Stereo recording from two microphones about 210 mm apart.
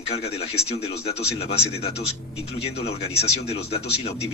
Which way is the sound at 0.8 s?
30° left (ahead or behind).